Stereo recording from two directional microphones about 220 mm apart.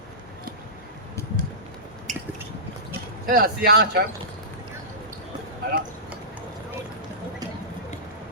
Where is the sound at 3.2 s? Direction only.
40° right (ahead or behind).